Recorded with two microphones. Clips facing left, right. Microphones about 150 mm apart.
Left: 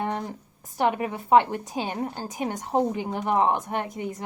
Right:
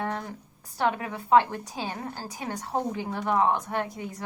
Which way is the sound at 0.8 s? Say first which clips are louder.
Left 3 dB; 15° left (ahead or behind).